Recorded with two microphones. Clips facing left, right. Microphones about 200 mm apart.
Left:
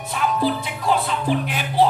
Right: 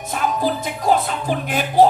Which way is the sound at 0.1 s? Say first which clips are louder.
Even; 45° right (ahead or behind).